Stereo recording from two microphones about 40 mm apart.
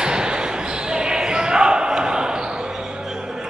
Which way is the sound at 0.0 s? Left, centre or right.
Right.